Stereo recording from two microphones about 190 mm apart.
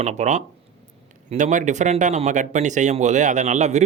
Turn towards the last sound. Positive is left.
turn(degrees=-35)  # may be behind; listen again after turning